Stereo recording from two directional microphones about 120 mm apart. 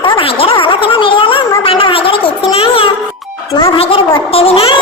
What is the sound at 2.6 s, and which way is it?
Music, 50° left (ahead or behind).